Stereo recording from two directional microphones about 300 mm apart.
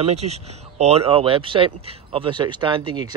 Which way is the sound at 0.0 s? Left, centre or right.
Right.